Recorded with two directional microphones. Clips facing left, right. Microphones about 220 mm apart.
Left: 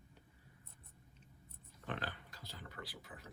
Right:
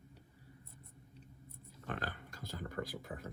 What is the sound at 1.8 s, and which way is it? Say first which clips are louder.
Pig: right 2 dB; 45° right (ahead or behind).